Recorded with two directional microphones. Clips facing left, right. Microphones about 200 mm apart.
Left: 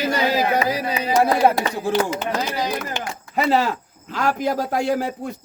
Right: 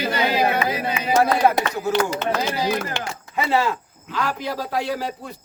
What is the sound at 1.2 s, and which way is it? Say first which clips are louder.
Speech: left 1 dB; 25° left (ahead or behind).